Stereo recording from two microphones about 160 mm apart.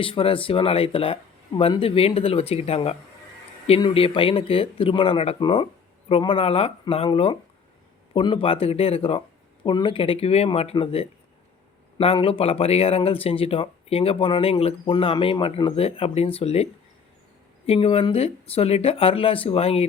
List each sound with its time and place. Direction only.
0.0 s speech: 35° left (ahead or behind)
17.7 s speech: 35° left (ahead or behind)